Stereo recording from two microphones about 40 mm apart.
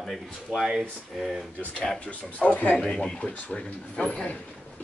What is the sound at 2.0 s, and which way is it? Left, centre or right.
Speech, left.